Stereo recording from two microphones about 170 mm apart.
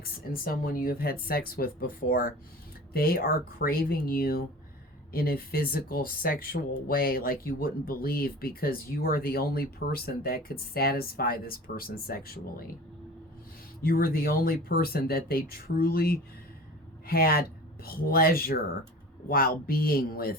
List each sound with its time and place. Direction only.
0.0 s speech: 55° left (ahead or behind)
13.8 s speech: 60° left (ahead or behind)